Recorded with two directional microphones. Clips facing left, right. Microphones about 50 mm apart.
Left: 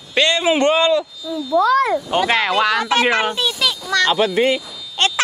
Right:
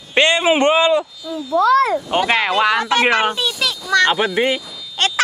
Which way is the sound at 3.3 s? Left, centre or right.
Centre.